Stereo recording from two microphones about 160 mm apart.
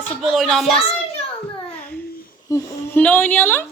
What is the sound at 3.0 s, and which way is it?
Speech, 10° left (ahead or behind).